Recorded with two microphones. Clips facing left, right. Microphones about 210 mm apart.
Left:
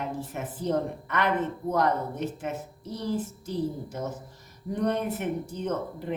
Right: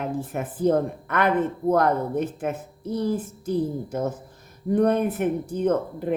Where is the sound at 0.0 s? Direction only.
55° right (ahead or behind).